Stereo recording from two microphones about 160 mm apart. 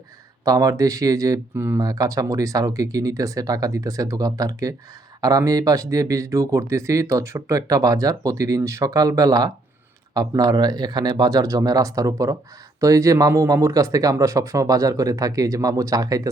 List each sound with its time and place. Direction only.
0.4 s speech: 20° right (ahead or behind)